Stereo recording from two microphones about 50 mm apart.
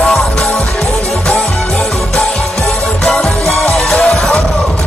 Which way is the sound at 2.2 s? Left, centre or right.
Centre.